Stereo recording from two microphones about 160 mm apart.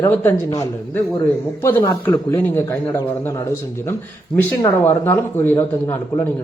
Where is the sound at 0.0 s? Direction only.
15° left (ahead or behind).